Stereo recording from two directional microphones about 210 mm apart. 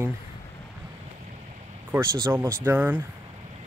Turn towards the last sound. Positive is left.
turn(degrees=-10)  # may be behind; listen again after turning